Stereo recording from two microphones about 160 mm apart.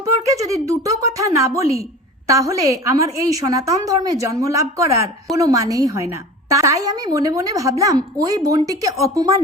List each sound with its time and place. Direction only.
0.0 s a woman's voice: 20° right (ahead or behind)